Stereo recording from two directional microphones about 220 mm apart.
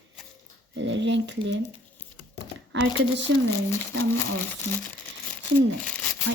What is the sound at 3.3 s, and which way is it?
Speech, 60° right (ahead or behind).